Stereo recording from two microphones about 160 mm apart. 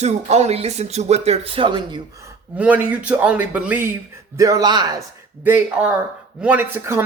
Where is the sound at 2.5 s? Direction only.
10° right (ahead or behind).